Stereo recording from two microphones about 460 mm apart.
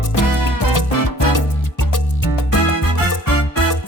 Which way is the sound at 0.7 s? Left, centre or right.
Left.